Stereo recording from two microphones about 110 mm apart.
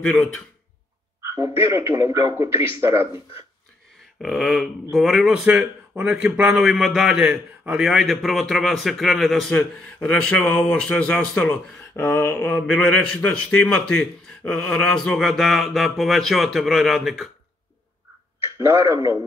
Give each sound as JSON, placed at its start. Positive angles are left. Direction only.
{"t": 0.0, "sound": "speech", "side_deg": 10}
{"t": 1.2, "sound": "a man's voice", "side_deg": -30}
{"t": 4.2, "sound": "speech", "side_deg": 0}
{"t": 11.9, "sound": "speech", "side_deg": 20}